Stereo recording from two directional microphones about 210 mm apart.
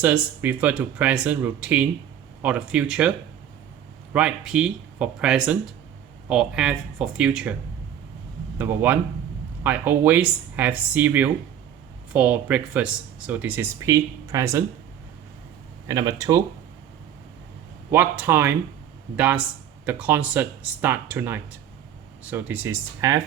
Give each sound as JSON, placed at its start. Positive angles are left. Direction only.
{"t": 0.0, "sound": "speech", "side_deg": -5}
{"t": 4.1, "sound": "speech", "side_deg": -5}
{"t": 8.5, "sound": "speech", "side_deg": -10}
{"t": 15.9, "sound": "speech", "side_deg": -15}
{"t": 17.9, "sound": "speech", "side_deg": -10}